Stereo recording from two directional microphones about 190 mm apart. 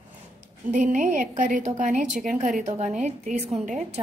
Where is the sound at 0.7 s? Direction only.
40° right (ahead or behind).